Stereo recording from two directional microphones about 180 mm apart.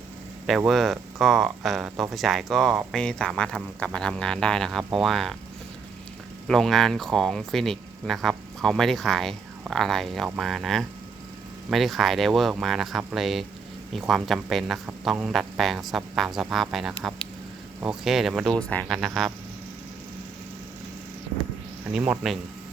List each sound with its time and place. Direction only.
0.4 s speech: centre (ahead or behind)
6.5 s speech: centre (ahead or behind)
21.9 s speech: 5° right (ahead or behind)